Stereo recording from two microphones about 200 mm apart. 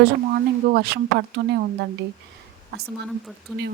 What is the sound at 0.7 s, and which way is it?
Speech, 55° right (ahead or behind).